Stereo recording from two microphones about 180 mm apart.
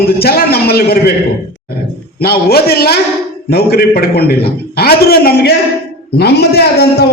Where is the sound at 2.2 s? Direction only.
60° left (ahead or behind).